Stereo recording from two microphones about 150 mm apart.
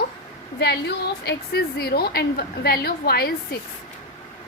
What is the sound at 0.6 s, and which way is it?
A woman's voice, 90° left.